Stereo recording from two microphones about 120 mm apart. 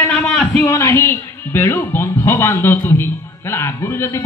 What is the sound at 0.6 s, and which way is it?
A man's voice, 20° left (ahead or behind).